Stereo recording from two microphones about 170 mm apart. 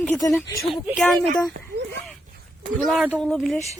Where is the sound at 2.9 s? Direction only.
5° left (ahead or behind).